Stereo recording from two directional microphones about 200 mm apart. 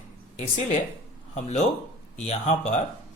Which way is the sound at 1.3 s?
35° left (ahead or behind).